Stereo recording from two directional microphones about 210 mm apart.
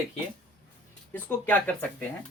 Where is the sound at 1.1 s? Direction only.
10° left (ahead or behind).